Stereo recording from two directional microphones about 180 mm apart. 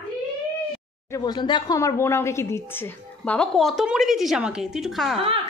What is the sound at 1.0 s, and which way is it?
Speech, 20° left (ahead or behind).